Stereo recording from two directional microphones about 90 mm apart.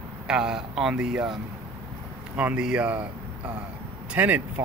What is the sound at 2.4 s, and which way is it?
Speech, 15° right (ahead or behind).